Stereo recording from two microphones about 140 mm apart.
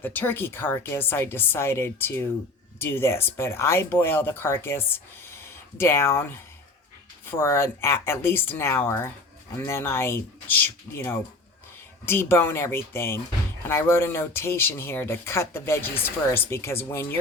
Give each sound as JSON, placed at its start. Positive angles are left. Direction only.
{"t": 0.0, "sound": "speech", "side_deg": 15}
{"t": 7.3, "sound": "speech", "side_deg": 20}